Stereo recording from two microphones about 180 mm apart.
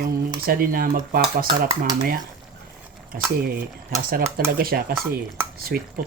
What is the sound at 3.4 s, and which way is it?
Speech, 55° right (ahead or behind).